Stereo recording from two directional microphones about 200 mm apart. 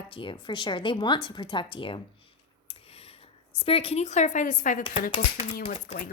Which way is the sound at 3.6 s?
30° left (ahead or behind).